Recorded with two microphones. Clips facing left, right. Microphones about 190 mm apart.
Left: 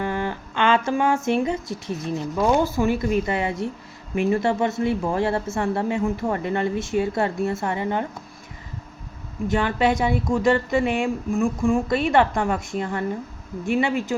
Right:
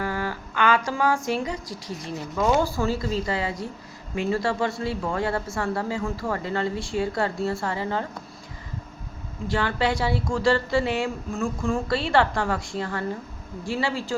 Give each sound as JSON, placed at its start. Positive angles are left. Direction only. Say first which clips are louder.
{"t": 0.0, "sound": "speech", "louder": "left 3 dB", "side_deg": 20}
{"t": 9.5, "sound": "speech", "louder": "left 4 dB", "side_deg": 20}